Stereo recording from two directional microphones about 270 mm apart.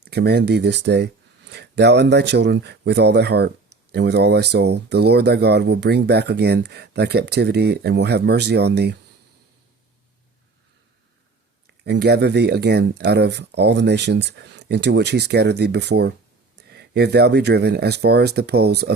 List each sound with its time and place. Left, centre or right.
0.0 s speech: right
11.9 s speech: right